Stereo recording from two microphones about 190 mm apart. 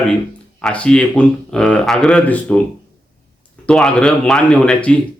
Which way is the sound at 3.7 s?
Centre (ahead or behind).